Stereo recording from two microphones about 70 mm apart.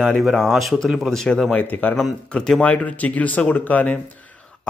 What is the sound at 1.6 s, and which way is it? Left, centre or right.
Speech, left.